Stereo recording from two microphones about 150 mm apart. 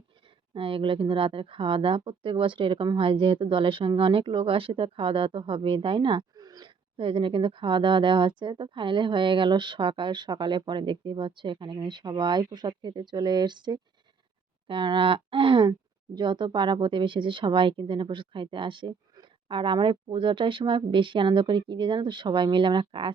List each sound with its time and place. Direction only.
0.5 s speech: 35° right (ahead or behind)